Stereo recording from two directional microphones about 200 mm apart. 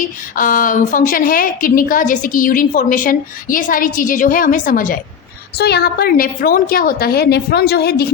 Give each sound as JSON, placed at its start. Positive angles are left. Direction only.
{"t": 0.3, "sound": "a woman's voice", "side_deg": 45}
{"t": 5.5, "sound": "a woman's voice", "side_deg": 55}